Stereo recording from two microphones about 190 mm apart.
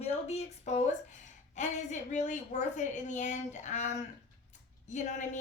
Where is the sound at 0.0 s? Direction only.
35° left (ahead or behind).